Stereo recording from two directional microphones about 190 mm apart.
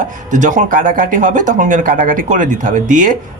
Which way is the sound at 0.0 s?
40° right (ahead or behind).